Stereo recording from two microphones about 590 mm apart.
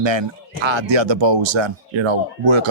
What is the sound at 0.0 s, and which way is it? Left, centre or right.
Speech, right.